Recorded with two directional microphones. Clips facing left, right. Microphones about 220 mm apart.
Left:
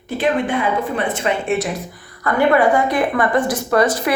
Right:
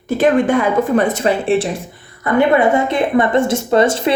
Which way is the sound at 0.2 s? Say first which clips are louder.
Right 5 dB; 45° right (ahead or behind).